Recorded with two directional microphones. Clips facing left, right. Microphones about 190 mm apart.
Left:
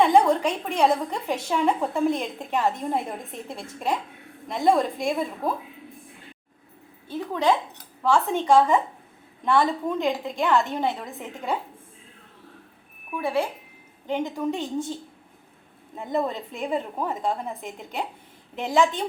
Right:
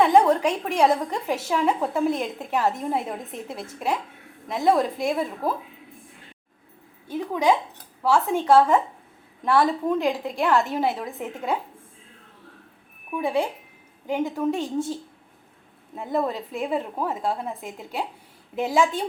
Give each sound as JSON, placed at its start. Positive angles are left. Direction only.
{"t": 0.0, "sound": "a woman's voice", "side_deg": -5}
{"t": 7.1, "sound": "a woman's voice", "side_deg": -10}
{"t": 13.1, "sound": "a woman's voice", "side_deg": -15}
{"t": 16.0, "sound": "a woman's voice", "side_deg": -5}